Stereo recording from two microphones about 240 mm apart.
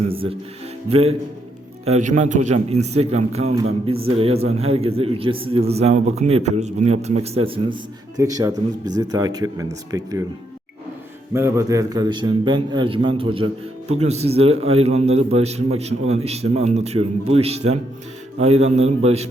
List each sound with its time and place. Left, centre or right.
0.1 s a man's voice: right
11.3 s a man's voice: centre; by 19.3 s right